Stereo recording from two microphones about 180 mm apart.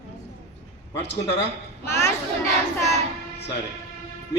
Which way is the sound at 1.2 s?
75° left (ahead or behind).